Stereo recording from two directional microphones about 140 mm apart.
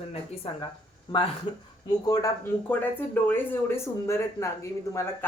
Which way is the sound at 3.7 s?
20° left (ahead or behind).